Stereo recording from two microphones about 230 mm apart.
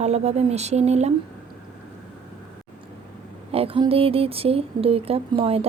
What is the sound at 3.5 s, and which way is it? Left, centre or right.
Speech, right.